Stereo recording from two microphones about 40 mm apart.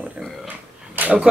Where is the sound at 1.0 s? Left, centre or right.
Right.